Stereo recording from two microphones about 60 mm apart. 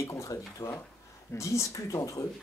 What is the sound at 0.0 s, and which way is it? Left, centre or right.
Speech, left.